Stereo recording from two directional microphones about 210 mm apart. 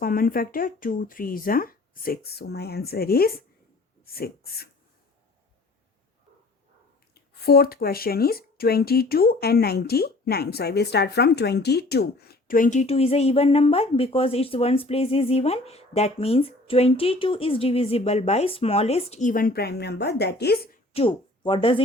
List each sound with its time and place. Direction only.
0.0 s speech: 45° left (ahead or behind)
7.1 s speech: 50° left (ahead or behind)
20.9 s speech: 25° left (ahead or behind)